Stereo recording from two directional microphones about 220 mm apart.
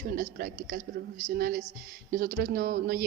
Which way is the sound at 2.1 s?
40° right (ahead or behind).